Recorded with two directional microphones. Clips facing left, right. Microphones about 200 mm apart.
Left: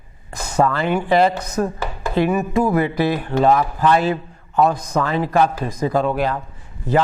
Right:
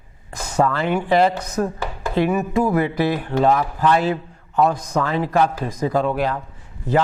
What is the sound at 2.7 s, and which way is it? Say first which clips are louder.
A man's voice: left 1 dB; 15° left (ahead or behind).